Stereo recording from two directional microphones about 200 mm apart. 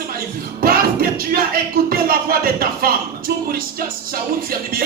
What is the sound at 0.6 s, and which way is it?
Speech, 45° right (ahead or behind).